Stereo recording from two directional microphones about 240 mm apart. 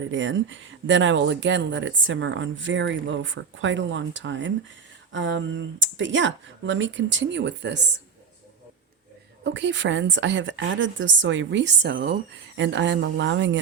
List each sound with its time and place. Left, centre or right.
0.1 s speech: right
9.4 s speech: right